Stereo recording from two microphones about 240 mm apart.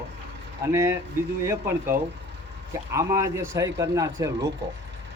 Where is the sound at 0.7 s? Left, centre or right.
Centre.